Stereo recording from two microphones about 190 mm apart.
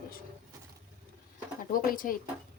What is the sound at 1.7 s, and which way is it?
Speech, 45° left (ahead or behind).